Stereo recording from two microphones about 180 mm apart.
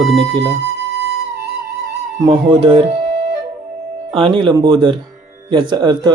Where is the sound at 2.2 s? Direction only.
25° right (ahead or behind).